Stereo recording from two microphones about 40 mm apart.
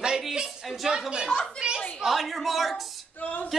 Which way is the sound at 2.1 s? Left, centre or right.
Centre.